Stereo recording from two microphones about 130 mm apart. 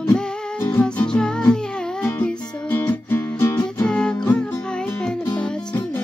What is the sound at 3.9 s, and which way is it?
Music, 5° left (ahead or behind).